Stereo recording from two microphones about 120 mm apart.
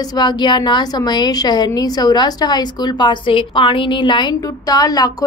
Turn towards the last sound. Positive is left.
turn(degrees=30)  # may be behind; listen again after turning